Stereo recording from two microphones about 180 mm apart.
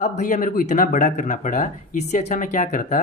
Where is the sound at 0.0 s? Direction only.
45° left (ahead or behind).